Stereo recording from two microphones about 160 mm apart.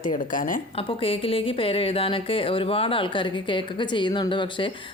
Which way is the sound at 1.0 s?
35° left (ahead or behind).